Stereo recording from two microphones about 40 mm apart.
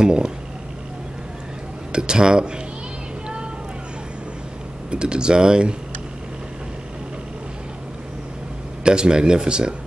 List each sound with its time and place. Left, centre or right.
0.0 s speech: centre
1.9 s speech: right
4.9 s speech: right
8.8 s speech: right